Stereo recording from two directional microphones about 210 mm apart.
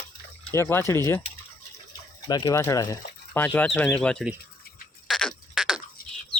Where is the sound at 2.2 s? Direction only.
20° left (ahead or behind).